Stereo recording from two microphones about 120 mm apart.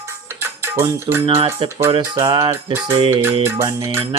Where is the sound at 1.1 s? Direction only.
35° right (ahead or behind).